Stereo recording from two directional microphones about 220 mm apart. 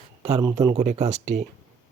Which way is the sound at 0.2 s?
25° right (ahead or behind).